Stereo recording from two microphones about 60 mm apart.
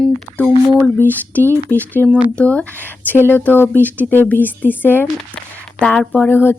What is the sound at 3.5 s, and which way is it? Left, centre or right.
Speech, left.